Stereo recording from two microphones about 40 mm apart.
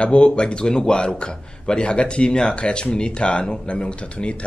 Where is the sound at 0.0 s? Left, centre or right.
Left.